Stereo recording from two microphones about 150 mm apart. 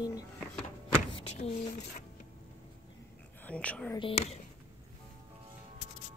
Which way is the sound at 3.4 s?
10° left (ahead or behind).